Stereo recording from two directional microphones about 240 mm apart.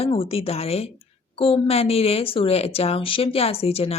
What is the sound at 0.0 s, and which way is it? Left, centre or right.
A woman's voice, left.